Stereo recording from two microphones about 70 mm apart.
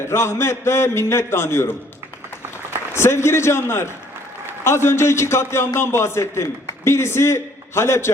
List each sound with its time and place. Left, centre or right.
0.0 s a man's voice: left
2.9 s a man's voice: left